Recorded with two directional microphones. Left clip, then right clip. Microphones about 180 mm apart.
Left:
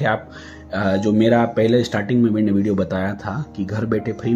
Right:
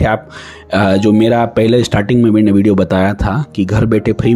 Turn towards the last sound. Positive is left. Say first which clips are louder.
# right 9 dB
turn(degrees=-40)  # may be behind; listen again after turning